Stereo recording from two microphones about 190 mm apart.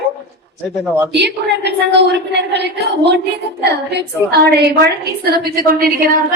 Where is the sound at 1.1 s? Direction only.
65° right (ahead or behind).